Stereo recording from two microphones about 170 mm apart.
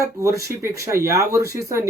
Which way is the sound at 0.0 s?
20° right (ahead or behind).